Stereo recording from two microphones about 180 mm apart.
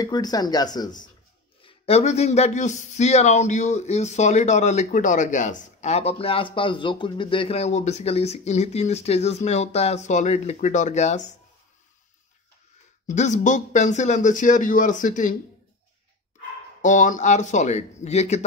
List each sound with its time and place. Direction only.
0.0 s speech: 20° left (ahead or behind)
1.6 s speech: 35° left (ahead or behind)
13.0 s speech: 40° left (ahead or behind)
16.8 s speech: 45° left (ahead or behind)